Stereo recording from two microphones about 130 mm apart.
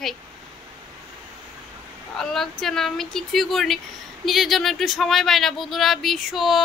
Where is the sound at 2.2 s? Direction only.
Centre (ahead or behind).